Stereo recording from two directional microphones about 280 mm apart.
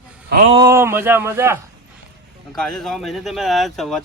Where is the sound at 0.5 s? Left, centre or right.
Centre.